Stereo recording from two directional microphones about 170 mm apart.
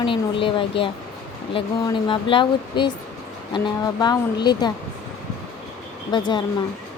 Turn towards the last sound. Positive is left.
turn(degrees=25)  # may be behind; listen again after turning